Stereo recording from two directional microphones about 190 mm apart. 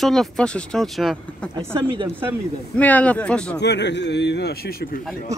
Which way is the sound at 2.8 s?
10° left (ahead or behind).